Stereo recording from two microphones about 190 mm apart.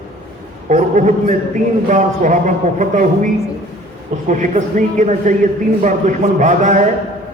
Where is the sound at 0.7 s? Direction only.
40° right (ahead or behind).